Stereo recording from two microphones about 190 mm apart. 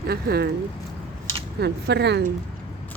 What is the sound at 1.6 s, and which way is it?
Speech, 60° right (ahead or behind).